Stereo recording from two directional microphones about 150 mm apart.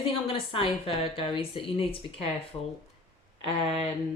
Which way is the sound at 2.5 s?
15° left (ahead or behind).